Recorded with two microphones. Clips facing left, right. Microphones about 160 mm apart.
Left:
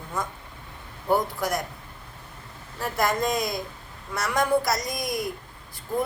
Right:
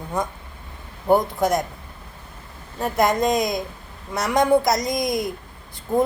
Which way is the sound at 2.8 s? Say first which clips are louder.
Right 5 dB; 20° right (ahead or behind).